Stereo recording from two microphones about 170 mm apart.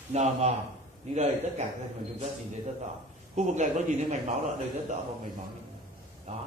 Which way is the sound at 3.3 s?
40° right (ahead or behind).